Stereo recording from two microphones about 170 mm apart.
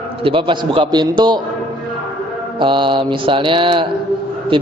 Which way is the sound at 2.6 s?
30° right (ahead or behind).